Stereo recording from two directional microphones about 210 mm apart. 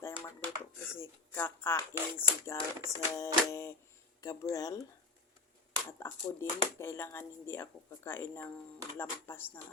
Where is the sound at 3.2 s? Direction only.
10° left (ahead or behind).